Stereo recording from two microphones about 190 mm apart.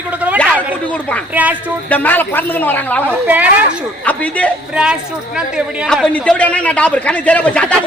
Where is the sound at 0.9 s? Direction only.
5° left (ahead or behind).